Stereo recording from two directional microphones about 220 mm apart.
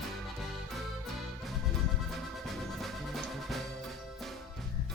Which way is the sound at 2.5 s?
Centre (ahead or behind).